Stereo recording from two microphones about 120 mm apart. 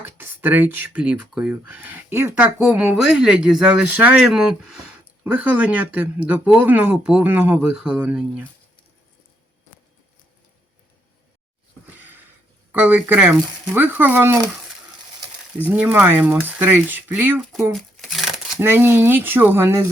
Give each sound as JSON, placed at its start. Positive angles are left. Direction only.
{"t": 0.0, "sound": "speech", "side_deg": -15}
{"t": 11.9, "sound": "sniff", "side_deg": -15}
{"t": 12.7, "sound": "speech", "side_deg": -15}
{"t": 15.7, "sound": "speech", "side_deg": -10}
{"t": 17.3, "sound": "shuffling cards", "side_deg": 5}
{"t": 18.6, "sound": "speech", "side_deg": -20}